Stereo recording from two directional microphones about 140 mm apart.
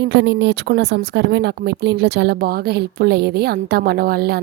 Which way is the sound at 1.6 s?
70° right (ahead or behind).